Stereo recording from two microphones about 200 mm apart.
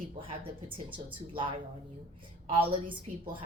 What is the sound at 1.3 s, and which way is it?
A woman's voice, 25° right (ahead or behind).